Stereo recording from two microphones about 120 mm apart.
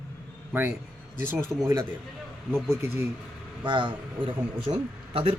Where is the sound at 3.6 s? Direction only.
40° right (ahead or behind).